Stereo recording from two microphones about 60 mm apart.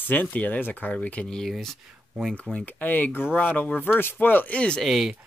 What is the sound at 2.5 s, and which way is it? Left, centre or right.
Speech, left.